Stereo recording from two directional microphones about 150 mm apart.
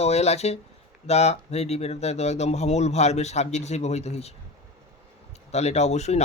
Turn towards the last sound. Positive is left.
turn(degrees=50)  # may be behind; listen again after turning